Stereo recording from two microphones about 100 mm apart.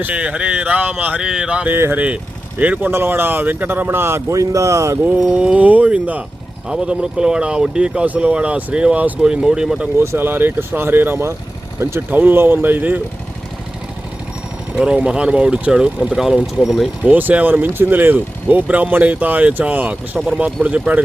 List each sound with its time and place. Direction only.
0.0 s speech: 10° right (ahead or behind)
1.7 s speech: 20° right (ahead or behind)
5.0 s speech: 10° right (ahead or behind)
10.0 s speech: 25° right (ahead or behind)
14.8 s speech: 10° right (ahead or behind)
17.1 s speech: 15° right (ahead or behind)